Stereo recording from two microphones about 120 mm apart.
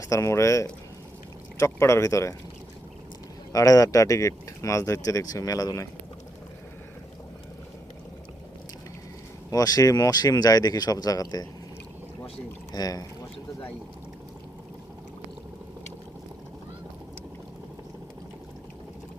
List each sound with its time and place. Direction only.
0.0 s speech: 25° left (ahead or behind)
3.5 s speech: 30° left (ahead or behind)
9.5 s speech: 30° left (ahead or behind)
12.7 s speech: 30° left (ahead or behind)